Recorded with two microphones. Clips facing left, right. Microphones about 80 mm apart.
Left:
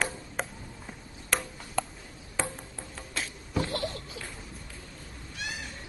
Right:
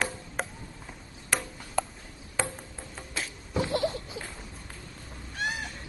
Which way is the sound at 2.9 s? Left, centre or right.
Centre.